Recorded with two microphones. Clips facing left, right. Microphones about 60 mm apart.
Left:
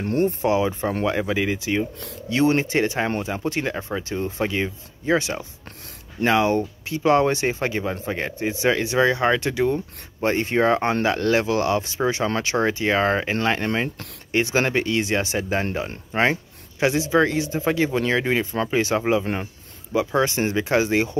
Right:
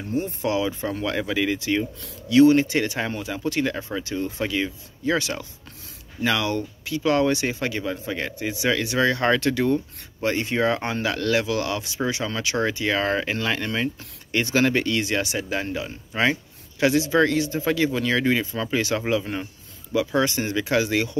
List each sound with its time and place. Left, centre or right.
0.0 s speech: left
0.3 s speech: left
2.2 s speech: left
10.2 s speech: left
16.8 s speech: left